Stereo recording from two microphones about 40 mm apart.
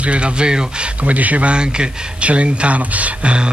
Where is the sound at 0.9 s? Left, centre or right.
Right.